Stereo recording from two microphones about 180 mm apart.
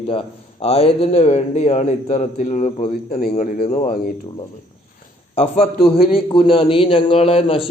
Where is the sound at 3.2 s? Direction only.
50° left (ahead or behind).